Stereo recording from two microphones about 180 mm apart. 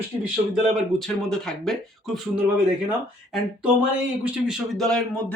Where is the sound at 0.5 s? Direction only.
Centre (ahead or behind).